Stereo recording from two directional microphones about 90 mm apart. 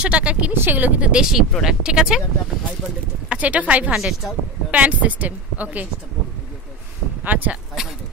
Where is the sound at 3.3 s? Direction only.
15° right (ahead or behind).